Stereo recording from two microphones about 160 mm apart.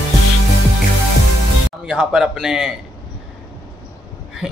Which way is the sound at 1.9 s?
5° right (ahead or behind).